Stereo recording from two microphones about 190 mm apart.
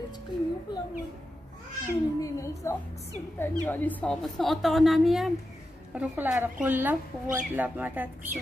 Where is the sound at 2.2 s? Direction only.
15° left (ahead or behind).